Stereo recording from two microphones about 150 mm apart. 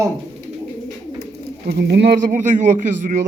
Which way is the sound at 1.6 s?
85° right.